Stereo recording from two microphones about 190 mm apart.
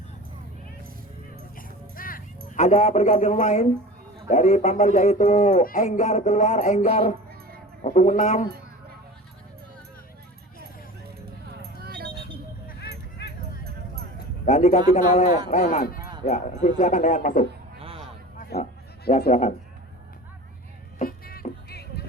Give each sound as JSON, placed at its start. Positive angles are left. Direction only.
{"t": 1.5, "sound": "horse", "side_deg": 45}
{"t": 2.5, "sound": "speech", "side_deg": 35}
{"t": 8.4, "sound": "a sound", "side_deg": -55}
{"t": 11.5, "sound": "a sound", "side_deg": -55}
{"t": 13.7, "sound": "clip-clop", "side_deg": -55}
{"t": 14.4, "sound": "a man's voice", "side_deg": 35}
{"t": 16.2, "sound": "speech", "side_deg": 40}
{"t": 17.7, "sound": "a sound", "side_deg": -30}
{"t": 18.3, "sound": "goat", "side_deg": 50}
{"t": 19.3, "sound": "speech", "side_deg": 35}
{"t": 21.0, "sound": "music", "side_deg": 50}